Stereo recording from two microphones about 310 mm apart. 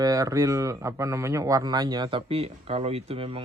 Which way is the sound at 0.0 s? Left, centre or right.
Centre.